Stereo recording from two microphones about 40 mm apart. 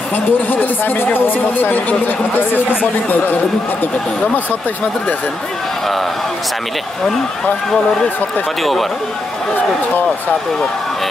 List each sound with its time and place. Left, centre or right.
0.1 s speech: left
1.3 s speech: left